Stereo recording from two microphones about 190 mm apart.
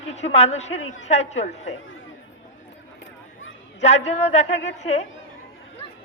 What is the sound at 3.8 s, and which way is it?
Speech, 35° left (ahead or behind).